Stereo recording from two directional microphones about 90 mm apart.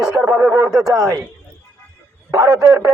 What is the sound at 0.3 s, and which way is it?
Speech, 15° right (ahead or behind).